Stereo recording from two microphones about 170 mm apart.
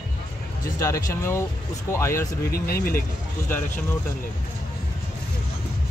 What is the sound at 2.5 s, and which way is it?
Speech, 60° left (ahead or behind).